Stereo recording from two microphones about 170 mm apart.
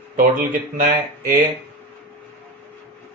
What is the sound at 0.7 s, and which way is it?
Speech, 55° right (ahead or behind).